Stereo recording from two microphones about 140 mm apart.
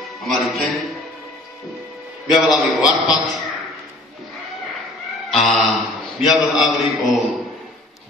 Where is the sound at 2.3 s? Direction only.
5° right (ahead or behind).